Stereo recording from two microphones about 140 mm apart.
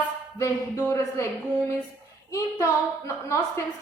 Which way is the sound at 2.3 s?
20° left (ahead or behind).